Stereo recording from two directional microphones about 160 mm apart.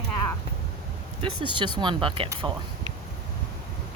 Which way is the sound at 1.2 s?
30° right (ahead or behind).